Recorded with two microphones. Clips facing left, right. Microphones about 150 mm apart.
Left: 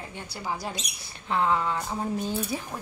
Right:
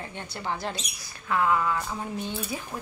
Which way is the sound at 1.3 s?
25° left (ahead or behind).